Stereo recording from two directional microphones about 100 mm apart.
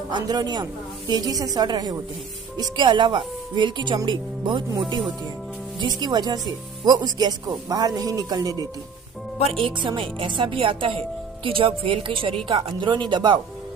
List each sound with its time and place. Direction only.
0.1 s a woman's voice: 45° right (ahead or behind)
5.8 s a woman's voice: 45° right (ahead or behind)
9.5 s speech: 60° right (ahead or behind)